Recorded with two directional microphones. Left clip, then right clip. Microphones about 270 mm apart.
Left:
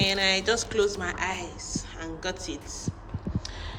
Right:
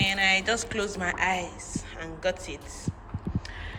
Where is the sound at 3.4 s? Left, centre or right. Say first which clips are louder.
Left 1 dB; centre.